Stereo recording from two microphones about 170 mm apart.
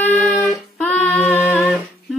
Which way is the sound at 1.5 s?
10° left (ahead or behind).